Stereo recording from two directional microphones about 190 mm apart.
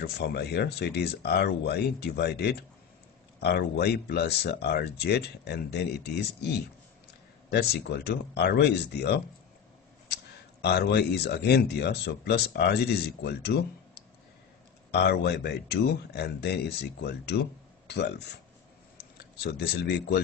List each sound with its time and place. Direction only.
0.0 s speech: 60° left (ahead or behind)
10.6 s speech: 60° left (ahead or behind)
14.9 s speech: 60° left (ahead or behind)